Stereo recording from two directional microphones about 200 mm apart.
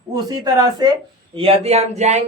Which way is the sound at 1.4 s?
30° right (ahead or behind).